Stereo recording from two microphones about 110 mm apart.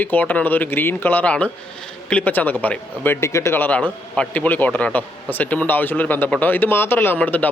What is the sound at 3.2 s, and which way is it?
A man's voice, 25° left (ahead or behind).